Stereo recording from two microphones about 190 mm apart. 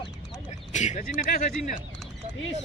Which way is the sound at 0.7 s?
40° left (ahead or behind).